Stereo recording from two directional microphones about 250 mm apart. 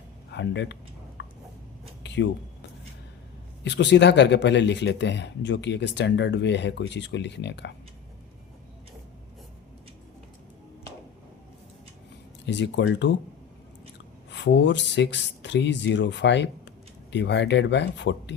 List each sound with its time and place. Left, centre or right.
0.3 s speech: left
1.2 s a sound: left
3.6 s speech: left
12.5 s speech: left
14.3 s speech: left